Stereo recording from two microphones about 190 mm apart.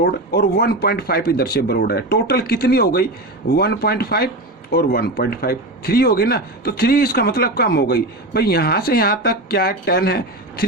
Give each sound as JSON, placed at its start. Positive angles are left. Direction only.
{"t": 0.0, "sound": "speech", "side_deg": 55}